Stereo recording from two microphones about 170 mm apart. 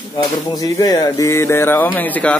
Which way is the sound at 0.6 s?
20° left (ahead or behind).